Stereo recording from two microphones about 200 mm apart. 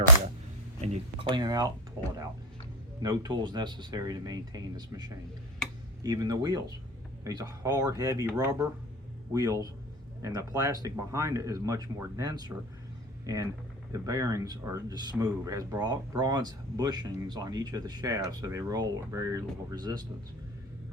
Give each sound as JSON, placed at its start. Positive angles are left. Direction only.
{"t": 1.2, "sound": "speech", "side_deg": -25}
{"t": 9.3, "sound": "speech", "side_deg": -15}